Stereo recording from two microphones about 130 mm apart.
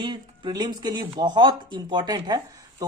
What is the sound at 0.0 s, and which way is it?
Speech, 35° right (ahead or behind).